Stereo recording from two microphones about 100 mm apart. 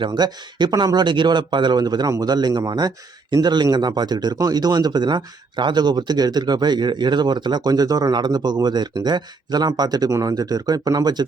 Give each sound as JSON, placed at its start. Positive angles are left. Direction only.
{"t": 0.0, "sound": "speech", "side_deg": -50}